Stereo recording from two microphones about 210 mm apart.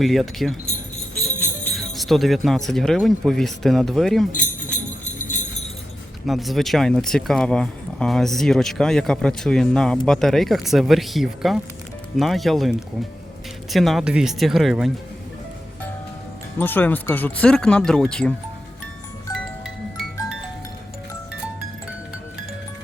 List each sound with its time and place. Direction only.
0.0 s speech: centre (ahead or behind)
6.2 s speech: centre (ahead or behind)
16.6 s speech: 10° left (ahead or behind)